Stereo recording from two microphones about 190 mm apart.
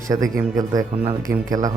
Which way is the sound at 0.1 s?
20° right (ahead or behind).